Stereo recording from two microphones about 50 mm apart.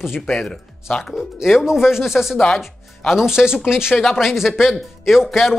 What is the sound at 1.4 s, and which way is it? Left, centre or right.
Speech, centre.